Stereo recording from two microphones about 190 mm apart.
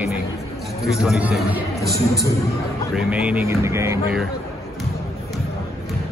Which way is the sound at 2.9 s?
5° right (ahead or behind).